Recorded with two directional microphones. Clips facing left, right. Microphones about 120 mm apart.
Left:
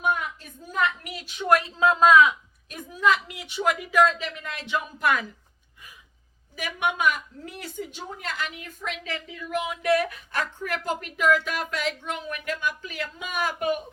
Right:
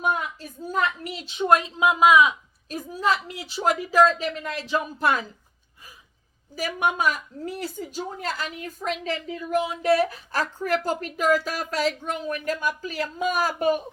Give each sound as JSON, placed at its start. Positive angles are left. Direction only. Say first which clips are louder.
{"t": 0.7, "sound": "a woman's voice", "louder": "right 1 dB", "side_deg": -30}
{"t": 2.6, "sound": "a woman's voice", "louder": "left 1 dB", "side_deg": -35}
{"t": 6.6, "sound": "a woman's voice", "louder": "right 2 dB", "side_deg": -35}